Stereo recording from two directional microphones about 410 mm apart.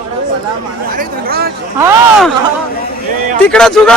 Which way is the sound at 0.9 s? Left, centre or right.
Right.